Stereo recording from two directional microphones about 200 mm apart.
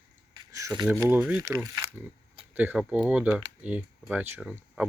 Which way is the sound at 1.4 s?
15° right (ahead or behind).